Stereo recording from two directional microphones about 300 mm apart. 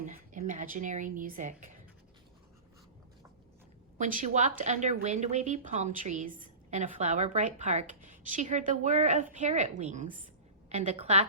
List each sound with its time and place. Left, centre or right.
0.0 s a woman's voice: right
3.9 s speech: right